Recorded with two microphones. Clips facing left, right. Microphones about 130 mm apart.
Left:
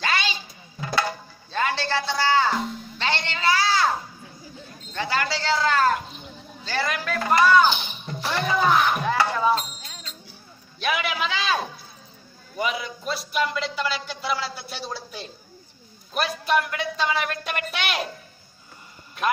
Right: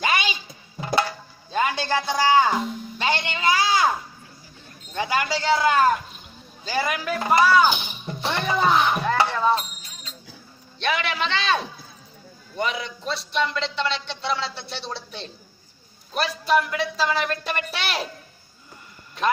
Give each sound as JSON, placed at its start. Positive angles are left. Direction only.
{"t": 0.0, "sound": "music", "side_deg": -15}
{"t": 4.9, "sound": "speech", "side_deg": -15}
{"t": 8.2, "sound": "music", "side_deg": -20}
{"t": 9.0, "sound": "a sound", "side_deg": 5}
{"t": 10.8, "sound": "a man's voice", "side_deg": 5}